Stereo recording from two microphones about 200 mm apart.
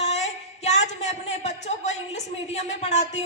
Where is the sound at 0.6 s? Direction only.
35° left (ahead or behind).